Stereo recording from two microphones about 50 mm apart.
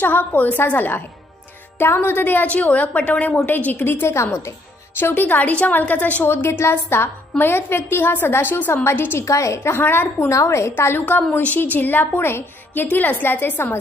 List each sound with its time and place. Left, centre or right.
0.0 s a woman's voice: left
1.8 s a woman's voice: left
2.4 s a woman's voice: left
4.1 s a woman's voice: left
4.9 s a woman's voice: left
6.3 s a woman's voice: left
9.2 s a woman's voice: left
9.8 s a woman's voice: left
10.3 s a woman's voice: left
10.7 s a woman's voice: left
12.8 s a woman's voice: left